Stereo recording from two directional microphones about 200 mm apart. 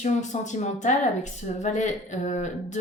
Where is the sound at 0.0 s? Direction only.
35° left (ahead or behind).